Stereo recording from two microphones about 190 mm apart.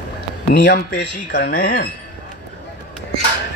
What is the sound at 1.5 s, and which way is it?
Speech, 50° left (ahead or behind).